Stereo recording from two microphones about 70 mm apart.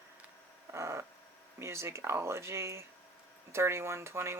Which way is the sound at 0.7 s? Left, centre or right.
Right.